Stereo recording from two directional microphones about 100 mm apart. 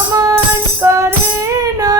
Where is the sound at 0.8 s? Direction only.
30° right (ahead or behind).